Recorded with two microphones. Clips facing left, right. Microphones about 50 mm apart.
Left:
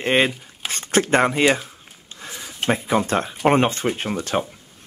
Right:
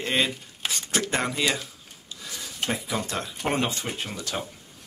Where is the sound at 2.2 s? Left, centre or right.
Left.